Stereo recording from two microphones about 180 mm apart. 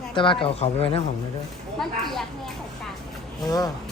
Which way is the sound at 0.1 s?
25° left (ahead or behind).